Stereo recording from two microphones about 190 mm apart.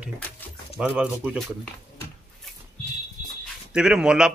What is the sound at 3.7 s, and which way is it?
Speech, 5° right (ahead or behind).